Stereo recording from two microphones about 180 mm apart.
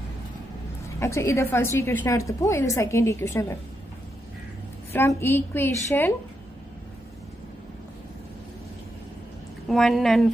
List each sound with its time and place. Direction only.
0.9 s a woman's voice: 15° left (ahead or behind)
4.9 s a woman's voice: 15° left (ahead or behind)
9.7 s speech: centre (ahead or behind)